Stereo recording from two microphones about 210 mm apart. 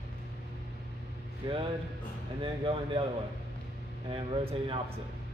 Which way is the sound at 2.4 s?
25° right (ahead or behind).